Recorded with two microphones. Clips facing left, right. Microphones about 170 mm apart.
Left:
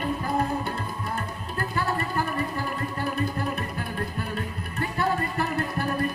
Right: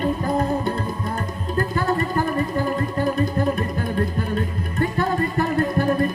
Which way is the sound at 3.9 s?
40° right (ahead or behind).